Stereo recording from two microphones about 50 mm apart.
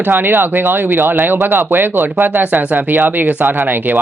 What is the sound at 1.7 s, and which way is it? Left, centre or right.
Speech, right.